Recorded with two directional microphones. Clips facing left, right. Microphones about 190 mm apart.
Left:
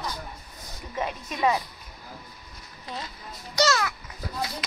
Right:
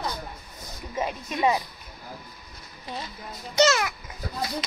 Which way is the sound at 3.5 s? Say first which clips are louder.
Right 3 dB; 20° right (ahead or behind).